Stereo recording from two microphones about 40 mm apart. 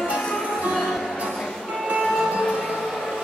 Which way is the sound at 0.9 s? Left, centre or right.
Centre.